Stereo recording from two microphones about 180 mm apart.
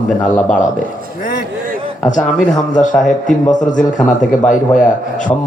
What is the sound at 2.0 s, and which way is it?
A man's voice, 45° left (ahead or behind).